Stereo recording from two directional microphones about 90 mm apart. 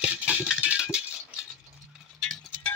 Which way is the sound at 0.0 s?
10° right (ahead or behind).